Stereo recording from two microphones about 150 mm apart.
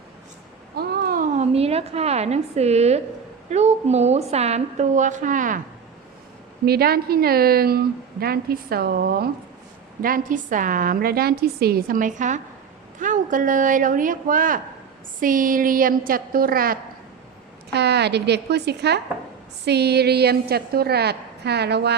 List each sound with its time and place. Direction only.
0.8 s a sound: 80° right
1.4 s a woman's voice: 45° right (ahead or behind); by 5.5 s 60° right (ahead or behind)
6.7 s a woman's voice: 90° right
10.0 s a woman's voice: 65° right (ahead or behind)
17.7 s a woman's voice: 90° right